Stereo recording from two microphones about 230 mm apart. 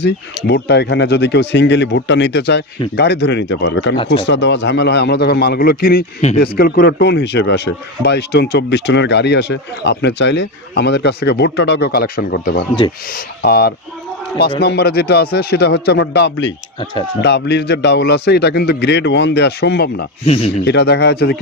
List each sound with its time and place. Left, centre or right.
0.0 s speech: left
3.9 s speech: left
4.3 s speech: left
20.2 s speech: left
20.6 s speech: left